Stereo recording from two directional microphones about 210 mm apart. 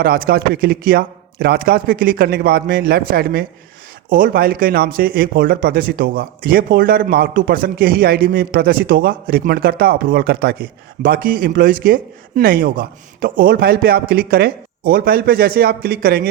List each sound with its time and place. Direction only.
0.0 s speech: 45° right (ahead or behind)